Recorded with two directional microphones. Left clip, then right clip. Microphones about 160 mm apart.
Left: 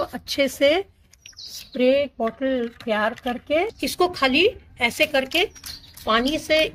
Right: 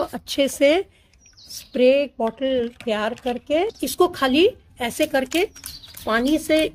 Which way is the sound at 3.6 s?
30° right (ahead or behind).